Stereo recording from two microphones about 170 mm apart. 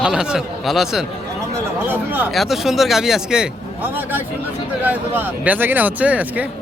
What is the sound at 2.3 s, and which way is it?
Speech, centre (ahead or behind).